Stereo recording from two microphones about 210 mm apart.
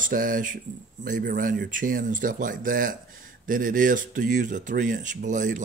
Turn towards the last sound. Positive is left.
turn(degrees=-35)  # may be behind; listen again after turning